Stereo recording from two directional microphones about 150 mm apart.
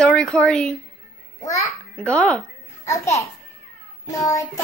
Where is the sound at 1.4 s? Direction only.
20° left (ahead or behind).